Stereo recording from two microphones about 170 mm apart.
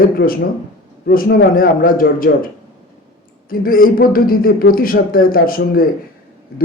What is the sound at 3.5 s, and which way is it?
A man's voice, 55° left (ahead or behind).